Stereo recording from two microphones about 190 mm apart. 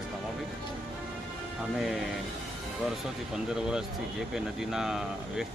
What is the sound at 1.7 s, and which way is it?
Speech, 5° right (ahead or behind).